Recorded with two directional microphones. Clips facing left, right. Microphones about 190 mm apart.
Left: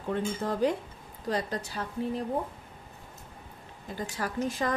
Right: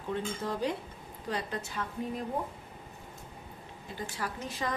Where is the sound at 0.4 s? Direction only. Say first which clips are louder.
Left 3 dB; 50° left (ahead or behind).